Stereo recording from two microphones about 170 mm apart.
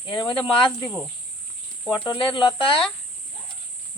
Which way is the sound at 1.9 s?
25° left (ahead or behind).